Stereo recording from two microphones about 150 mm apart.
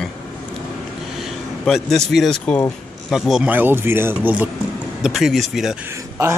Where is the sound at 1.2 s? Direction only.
Centre (ahead or behind).